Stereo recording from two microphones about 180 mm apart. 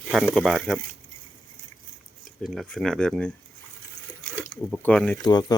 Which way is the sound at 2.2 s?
Centre (ahead or behind).